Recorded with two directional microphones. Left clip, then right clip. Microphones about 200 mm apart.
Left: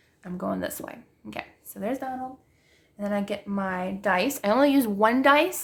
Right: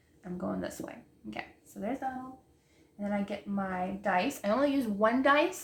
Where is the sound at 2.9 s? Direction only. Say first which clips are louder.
Left 6 dB; 50° left (ahead or behind).